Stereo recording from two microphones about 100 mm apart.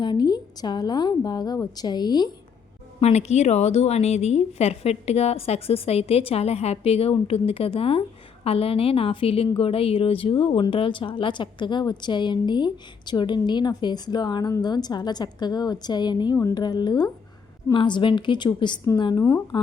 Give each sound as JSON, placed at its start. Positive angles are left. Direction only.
{"t": 0.0, "sound": "speech", "side_deg": 45}
{"t": 3.0, "sound": "a woman's voice", "side_deg": 90}
{"t": 19.1, "sound": "speech", "side_deg": 30}